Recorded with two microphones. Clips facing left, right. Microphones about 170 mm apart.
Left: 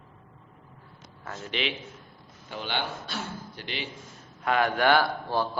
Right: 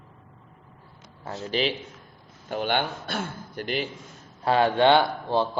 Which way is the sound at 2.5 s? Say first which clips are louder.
Right 6 dB; 50° right (ahead or behind).